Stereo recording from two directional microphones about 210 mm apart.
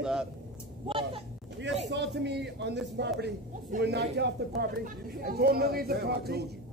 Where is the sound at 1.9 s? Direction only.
55° right (ahead or behind).